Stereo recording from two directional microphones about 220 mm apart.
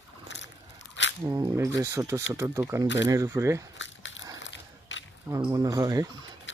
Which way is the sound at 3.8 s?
60° left (ahead or behind).